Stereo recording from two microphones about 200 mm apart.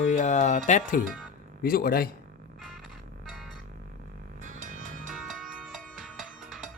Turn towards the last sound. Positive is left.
turn(degrees=0)  # may be behind; listen again after turning